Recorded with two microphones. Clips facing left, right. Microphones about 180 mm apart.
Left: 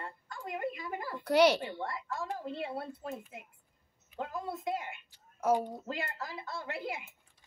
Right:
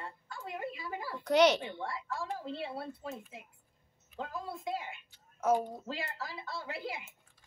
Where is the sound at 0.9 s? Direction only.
5° right (ahead or behind).